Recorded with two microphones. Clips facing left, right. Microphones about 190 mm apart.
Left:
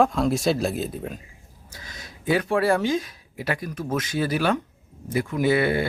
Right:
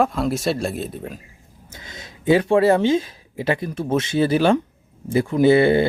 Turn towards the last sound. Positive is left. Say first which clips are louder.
# right 7 dB
turn(degrees=-25)  # may be behind; listen again after turning